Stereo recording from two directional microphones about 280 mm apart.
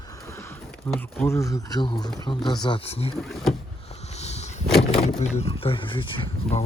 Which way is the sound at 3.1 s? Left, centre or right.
Centre.